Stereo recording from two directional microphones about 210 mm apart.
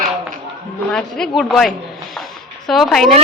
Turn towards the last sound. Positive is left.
turn(degrees=0)  # may be behind; listen again after turning